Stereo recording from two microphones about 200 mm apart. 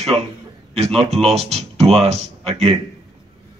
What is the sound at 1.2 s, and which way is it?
Speech, 30° right (ahead or behind).